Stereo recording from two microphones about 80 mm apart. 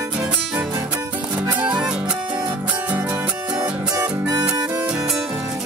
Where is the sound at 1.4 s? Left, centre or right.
Centre.